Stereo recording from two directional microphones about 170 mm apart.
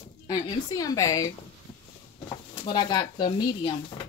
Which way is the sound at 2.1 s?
30° left (ahead or behind).